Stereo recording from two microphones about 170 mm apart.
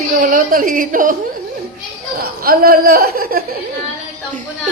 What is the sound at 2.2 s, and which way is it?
Speech, 60° right (ahead or behind).